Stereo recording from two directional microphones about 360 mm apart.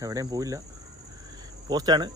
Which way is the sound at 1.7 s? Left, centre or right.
Centre.